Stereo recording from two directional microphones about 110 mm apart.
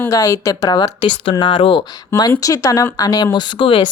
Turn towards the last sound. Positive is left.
turn(degrees=45)  # may be behind; listen again after turning